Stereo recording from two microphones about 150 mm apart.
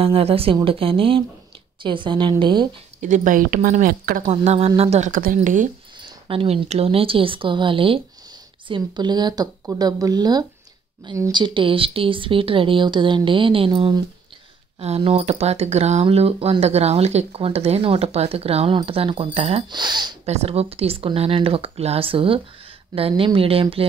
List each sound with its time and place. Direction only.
0.0 s speech: 40° right (ahead or behind)
3.0 s speech: 60° right (ahead or behind)
4.3 s speech: 45° right (ahead or behind)
5.1 s speech: 65° right (ahead or behind)
6.2 s speech: 40° right (ahead or behind)
20.2 s speech: 45° right (ahead or behind)